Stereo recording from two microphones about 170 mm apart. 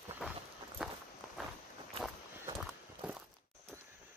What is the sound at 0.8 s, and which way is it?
Walk, 5° right (ahead or behind).